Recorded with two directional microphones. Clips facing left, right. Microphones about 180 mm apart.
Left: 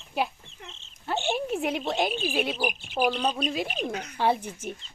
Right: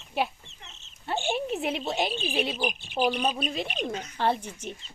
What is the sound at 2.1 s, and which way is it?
Speech, 20° right (ahead or behind).